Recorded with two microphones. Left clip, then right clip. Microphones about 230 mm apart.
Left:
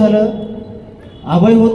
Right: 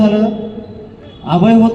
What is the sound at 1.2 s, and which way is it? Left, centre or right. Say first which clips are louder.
Speech: even; right.